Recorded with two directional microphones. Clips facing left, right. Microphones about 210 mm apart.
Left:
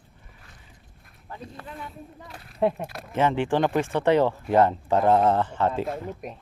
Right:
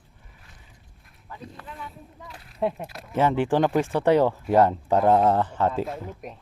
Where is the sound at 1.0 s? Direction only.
40° left (ahead or behind).